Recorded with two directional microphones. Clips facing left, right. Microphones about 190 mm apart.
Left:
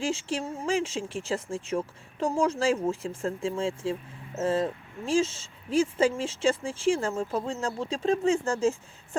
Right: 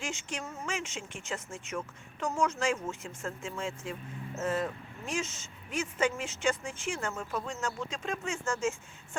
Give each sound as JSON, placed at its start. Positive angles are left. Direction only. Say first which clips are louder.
{"t": 0.0, "sound": "speech", "louder": "left 9 dB", "side_deg": 30}